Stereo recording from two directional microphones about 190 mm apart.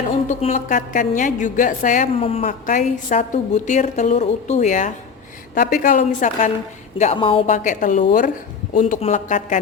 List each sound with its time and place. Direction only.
0.3 s a woman's voice: 40° left (ahead or behind)
2.2 s a woman's voice: 35° left (ahead or behind)
7.0 s a woman's voice: 30° left (ahead or behind)
7.4 s a woman's voice: 40° left (ahead or behind)